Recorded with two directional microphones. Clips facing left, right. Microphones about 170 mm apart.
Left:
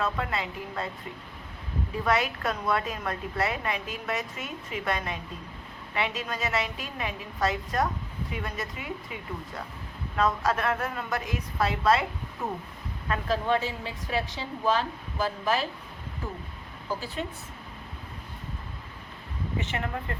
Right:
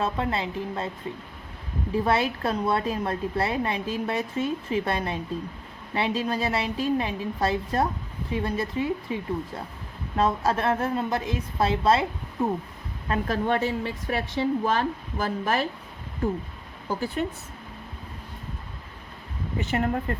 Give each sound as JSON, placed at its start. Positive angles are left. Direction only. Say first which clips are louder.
{"t": 0.0, "sound": "a woman's voice", "louder": "right 3 dB", "side_deg": -30}
{"t": 2.0, "sound": "a woman's voice", "louder": "right 1 dB", "side_deg": -30}
{"t": 10.2, "sound": "a woman's voice", "louder": "right 2 dB", "side_deg": -30}
{"t": 13.2, "sound": "speech", "louder": "right 1 dB", "side_deg": -55}
{"t": 19.5, "sound": "a woman's voice", "louder": "right 7 dB", "side_deg": -40}